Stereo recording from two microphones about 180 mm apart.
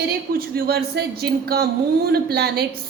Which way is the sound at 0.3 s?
60° right (ahead or behind).